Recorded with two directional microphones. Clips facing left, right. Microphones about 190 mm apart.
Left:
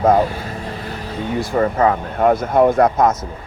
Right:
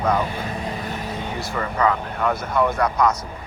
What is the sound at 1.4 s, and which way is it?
Speech, 50° left (ahead or behind).